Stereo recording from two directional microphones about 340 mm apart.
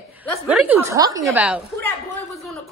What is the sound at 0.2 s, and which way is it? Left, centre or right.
A woman's voice, centre.